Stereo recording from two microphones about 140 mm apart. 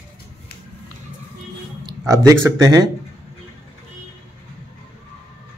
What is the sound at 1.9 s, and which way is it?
Speech, 25° right (ahead or behind).